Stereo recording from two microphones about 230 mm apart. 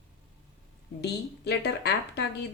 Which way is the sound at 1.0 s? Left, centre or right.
Left.